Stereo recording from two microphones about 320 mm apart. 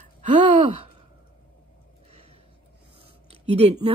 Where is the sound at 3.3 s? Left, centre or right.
Centre.